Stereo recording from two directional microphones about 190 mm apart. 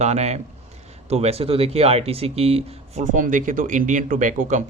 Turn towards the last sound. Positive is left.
turn(degrees=-40)  # may be behind; listen again after turning